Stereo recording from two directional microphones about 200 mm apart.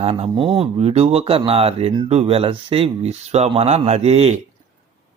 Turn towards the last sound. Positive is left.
turn(degrees=-35)  # may be behind; listen again after turning